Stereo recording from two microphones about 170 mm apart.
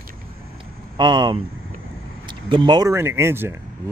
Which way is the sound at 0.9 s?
25° right (ahead or behind).